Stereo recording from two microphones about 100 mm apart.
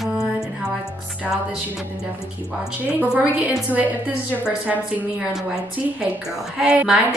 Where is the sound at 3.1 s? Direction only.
10° right (ahead or behind).